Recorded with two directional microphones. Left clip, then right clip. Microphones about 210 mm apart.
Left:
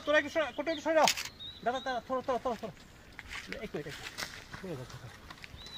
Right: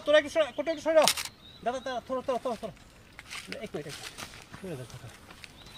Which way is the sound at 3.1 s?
55° right (ahead or behind).